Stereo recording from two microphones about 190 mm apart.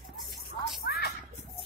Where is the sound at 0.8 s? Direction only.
55° left (ahead or behind).